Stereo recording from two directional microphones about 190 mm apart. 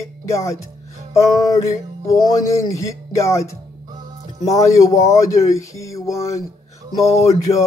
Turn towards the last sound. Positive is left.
turn(degrees=15)  # may be behind; listen again after turning